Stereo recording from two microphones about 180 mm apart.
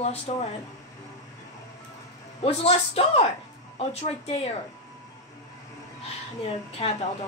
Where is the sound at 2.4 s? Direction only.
35° left (ahead or behind).